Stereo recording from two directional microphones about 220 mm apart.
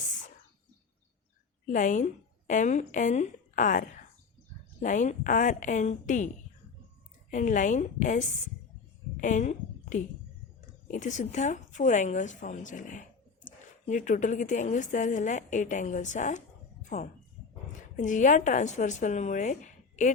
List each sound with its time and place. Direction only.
1.6 s a woman's voice: 35° left (ahead or behind)